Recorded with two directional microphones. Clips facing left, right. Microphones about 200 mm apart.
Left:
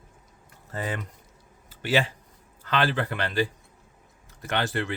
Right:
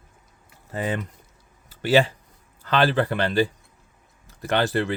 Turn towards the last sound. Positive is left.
turn(degrees=-35)  # may be behind; listen again after turning